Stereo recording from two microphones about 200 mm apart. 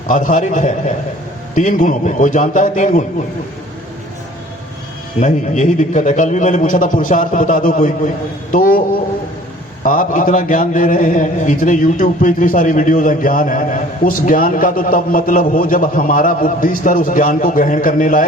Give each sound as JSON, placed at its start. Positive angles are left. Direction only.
{"t": 0.1, "sound": "a man's voice", "side_deg": 40}
{"t": 5.2, "sound": "a man's voice", "side_deg": 40}
{"t": 9.8, "sound": "a man's voice", "side_deg": 45}